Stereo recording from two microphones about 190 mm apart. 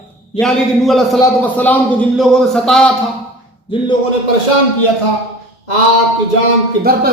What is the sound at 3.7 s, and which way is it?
Speech, 25° left (ahead or behind).